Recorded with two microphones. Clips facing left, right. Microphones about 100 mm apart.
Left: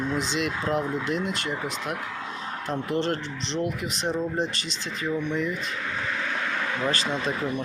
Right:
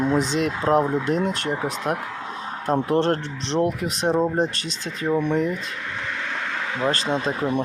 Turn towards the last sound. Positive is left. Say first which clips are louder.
# right 5 dB
turn(degrees=-40)  # may be behind; listen again after turning